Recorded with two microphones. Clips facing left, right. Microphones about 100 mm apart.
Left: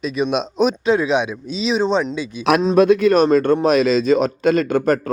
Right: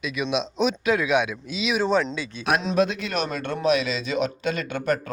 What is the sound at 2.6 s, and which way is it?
A man's voice, 50° left (ahead or behind).